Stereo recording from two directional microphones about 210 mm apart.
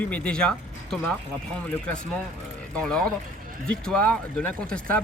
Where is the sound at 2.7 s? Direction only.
5° left (ahead or behind).